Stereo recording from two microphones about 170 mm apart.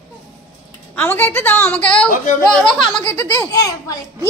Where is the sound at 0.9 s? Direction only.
10° left (ahead or behind).